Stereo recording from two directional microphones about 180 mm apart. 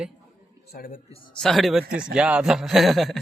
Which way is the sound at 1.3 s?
Centre (ahead or behind).